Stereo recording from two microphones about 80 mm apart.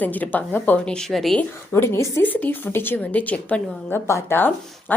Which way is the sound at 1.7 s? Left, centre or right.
Left.